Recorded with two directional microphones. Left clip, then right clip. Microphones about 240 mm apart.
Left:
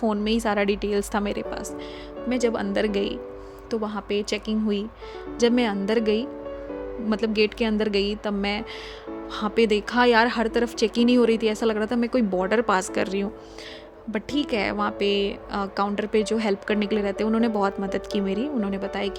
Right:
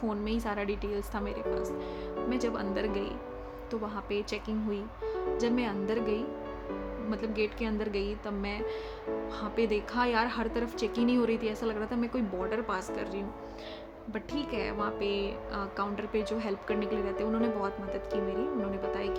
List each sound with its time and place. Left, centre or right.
0.0 s a woman's voice: left